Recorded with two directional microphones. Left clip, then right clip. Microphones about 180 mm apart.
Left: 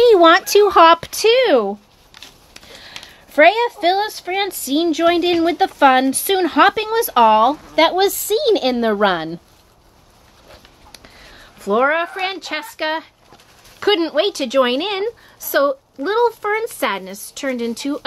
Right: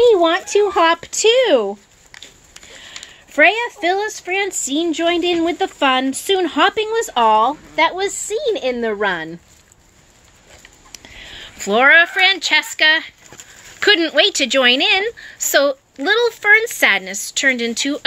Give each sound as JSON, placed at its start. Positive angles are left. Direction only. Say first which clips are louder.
{"t": 0.0, "sound": "speech", "louder": "left 3 dB", "side_deg": 55}
{"t": 3.3, "sound": "a woman's voice", "louder": "left 1 dB", "side_deg": 25}
{"t": 11.4, "sound": "speech", "louder": "right 4 dB", "side_deg": 5}
{"t": 13.7, "sound": "a woman's voice", "louder": "right 3 dB", "side_deg": 15}